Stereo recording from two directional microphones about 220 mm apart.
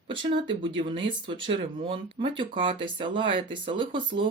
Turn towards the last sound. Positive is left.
turn(degrees=-20)  # may be behind; listen again after turning